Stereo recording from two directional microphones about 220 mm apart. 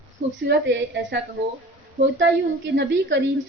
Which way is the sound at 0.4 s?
50° right (ahead or behind).